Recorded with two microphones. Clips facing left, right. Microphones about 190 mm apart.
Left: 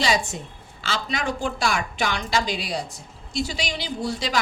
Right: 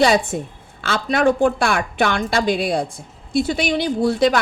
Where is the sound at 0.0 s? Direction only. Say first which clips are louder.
Right 8 dB; 60° right (ahead or behind).